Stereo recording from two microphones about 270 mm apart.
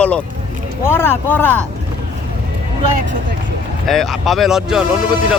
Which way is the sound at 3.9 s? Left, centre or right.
Centre.